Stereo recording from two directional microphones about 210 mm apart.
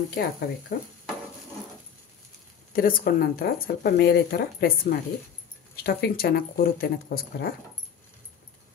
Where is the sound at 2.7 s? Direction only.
45° left (ahead or behind).